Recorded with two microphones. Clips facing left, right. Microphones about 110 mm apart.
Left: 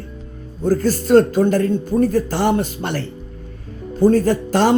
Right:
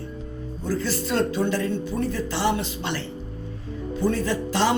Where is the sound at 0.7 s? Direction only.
45° left (ahead or behind).